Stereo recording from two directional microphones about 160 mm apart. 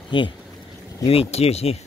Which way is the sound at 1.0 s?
40° left (ahead or behind).